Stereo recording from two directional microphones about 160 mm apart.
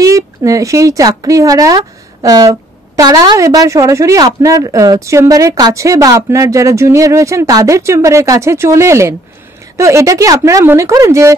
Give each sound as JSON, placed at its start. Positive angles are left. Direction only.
{"t": 0.0, "sound": "speech", "side_deg": -20}